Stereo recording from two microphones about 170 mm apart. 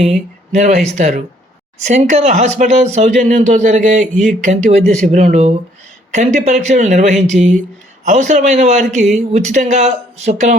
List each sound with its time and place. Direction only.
0.5 s speech: 45° right (ahead or behind)